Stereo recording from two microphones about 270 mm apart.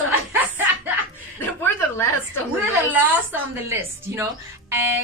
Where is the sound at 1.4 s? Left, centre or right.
Centre.